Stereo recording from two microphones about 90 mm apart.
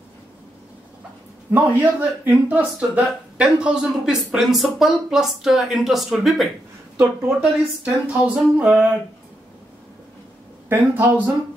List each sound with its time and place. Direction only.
1.5 s speech: 20° right (ahead or behind); by 6.5 s centre (ahead or behind)
7.0 s speech: 25° right (ahead or behind)
7.8 s speech: 15° right (ahead or behind)
10.7 s speech: 20° right (ahead or behind)